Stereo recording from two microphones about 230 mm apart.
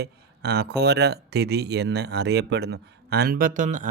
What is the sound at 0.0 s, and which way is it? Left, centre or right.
Speech, right.